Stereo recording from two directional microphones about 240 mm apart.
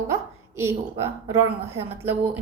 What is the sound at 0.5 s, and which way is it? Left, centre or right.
Speech, centre.